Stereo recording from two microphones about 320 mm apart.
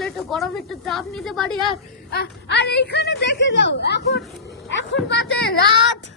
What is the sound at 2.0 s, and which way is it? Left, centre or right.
A woman's voice, left.